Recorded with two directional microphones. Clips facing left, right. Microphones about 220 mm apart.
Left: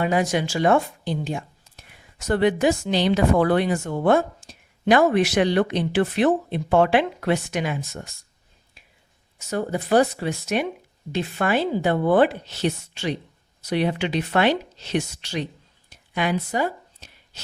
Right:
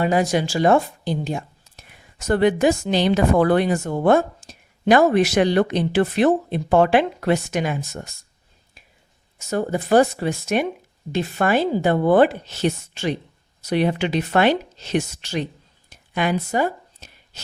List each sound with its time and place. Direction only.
0.0 s speech: 40° right (ahead or behind)
9.5 s speech: 45° right (ahead or behind)
15.9 s a sound: 45° right (ahead or behind)